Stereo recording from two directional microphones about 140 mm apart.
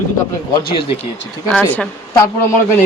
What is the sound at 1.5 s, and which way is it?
Speech, 10° left (ahead or behind).